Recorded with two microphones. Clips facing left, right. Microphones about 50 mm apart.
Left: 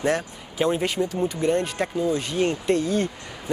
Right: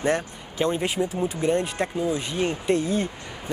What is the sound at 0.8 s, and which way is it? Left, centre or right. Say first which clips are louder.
Speech: left 1 dB; centre.